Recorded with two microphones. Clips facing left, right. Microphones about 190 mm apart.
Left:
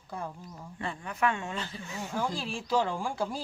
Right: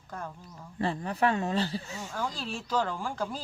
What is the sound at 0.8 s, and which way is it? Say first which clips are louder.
Speech: right 4 dB; 35° right (ahead or behind).